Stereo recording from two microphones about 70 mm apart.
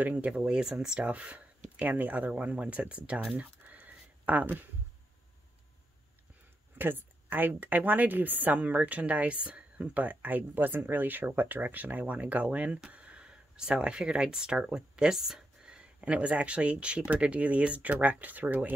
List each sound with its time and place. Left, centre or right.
0.0 s a woman's voice: right
3.3 s a sound: right
6.8 s a woman's voice: right